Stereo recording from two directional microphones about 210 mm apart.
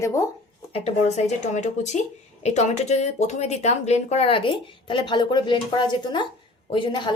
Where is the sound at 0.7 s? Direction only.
30° left (ahead or behind).